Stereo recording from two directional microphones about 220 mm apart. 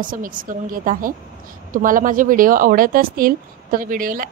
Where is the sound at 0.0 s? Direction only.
40° right (ahead or behind).